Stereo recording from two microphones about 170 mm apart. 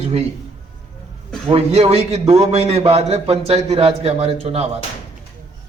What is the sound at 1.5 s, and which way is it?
A man's voice, 35° right (ahead or behind).